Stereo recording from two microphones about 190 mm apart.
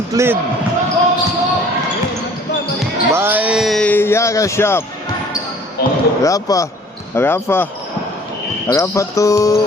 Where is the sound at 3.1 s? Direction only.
10° right (ahead or behind); by 4.8 s 15° left (ahead or behind).